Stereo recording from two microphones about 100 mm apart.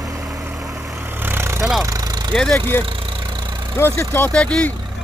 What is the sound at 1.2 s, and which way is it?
Vehicle, 25° right (ahead or behind).